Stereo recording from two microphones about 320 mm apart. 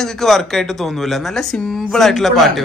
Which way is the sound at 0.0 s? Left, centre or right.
Centre.